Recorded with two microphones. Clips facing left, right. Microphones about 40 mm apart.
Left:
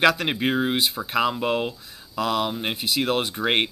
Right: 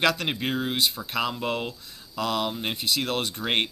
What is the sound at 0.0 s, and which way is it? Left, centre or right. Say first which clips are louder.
Speech: left 4 dB; centre.